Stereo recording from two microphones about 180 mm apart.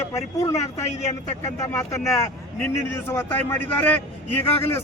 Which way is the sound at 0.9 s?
40° left (ahead or behind).